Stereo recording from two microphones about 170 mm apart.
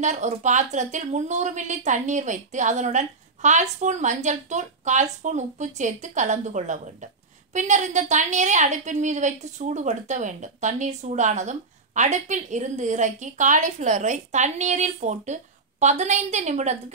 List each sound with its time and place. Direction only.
0.0 s a woman's voice: 45° right (ahead or behind)